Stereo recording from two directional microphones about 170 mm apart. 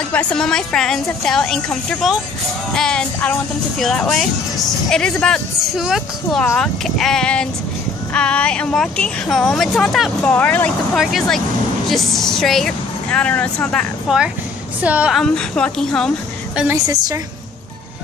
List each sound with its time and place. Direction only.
0.1 s speech: 5° left (ahead or behind)
6.4 s speech: 10° left (ahead or behind)
14.8 s speech: 10° right (ahead or behind)
16.7 s a woman's voice: 20° right (ahead or behind)